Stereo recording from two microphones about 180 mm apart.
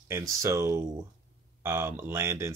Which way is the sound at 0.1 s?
15° right (ahead or behind).